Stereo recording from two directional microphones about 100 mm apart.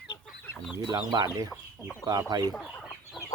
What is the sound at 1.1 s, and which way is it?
Speech, 45° right (ahead or behind).